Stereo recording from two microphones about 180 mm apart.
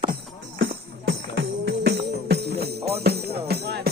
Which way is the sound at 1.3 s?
75° right (ahead or behind).